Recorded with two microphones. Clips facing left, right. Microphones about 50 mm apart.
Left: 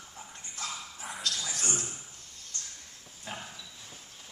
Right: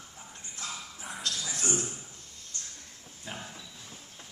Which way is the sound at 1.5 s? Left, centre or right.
Right.